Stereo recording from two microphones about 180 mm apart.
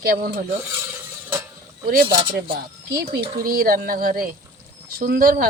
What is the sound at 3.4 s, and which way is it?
Speech, 55° right (ahead or behind).